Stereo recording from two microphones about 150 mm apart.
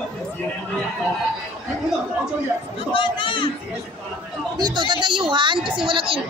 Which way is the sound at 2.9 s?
35° left (ahead or behind).